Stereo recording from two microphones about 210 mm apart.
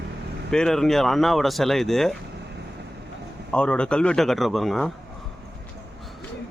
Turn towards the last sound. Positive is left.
turn(degrees=0)  # may be behind; listen again after turning